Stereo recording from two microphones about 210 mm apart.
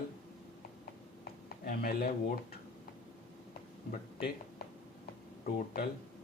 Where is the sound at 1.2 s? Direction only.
45° left (ahead or behind).